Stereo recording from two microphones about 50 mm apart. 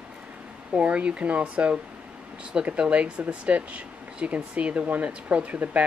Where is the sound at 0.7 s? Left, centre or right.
Right.